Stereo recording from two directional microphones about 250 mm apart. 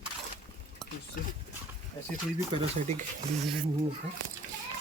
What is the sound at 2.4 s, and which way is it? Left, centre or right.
Speech, right.